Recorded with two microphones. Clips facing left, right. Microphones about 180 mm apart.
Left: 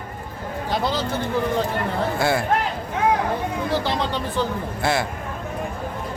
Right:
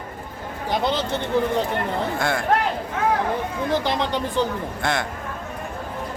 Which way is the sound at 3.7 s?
15° right (ahead or behind).